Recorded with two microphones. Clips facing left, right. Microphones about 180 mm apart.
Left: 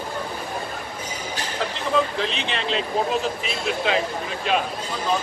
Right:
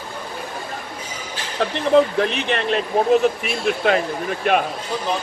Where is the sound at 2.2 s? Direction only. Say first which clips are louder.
Right 6 dB; 55° right (ahead or behind).